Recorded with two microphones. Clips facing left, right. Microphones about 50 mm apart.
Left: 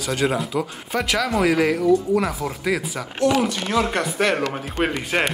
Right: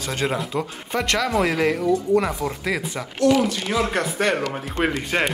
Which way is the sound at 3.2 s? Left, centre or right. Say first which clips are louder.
Right 2 dB; left.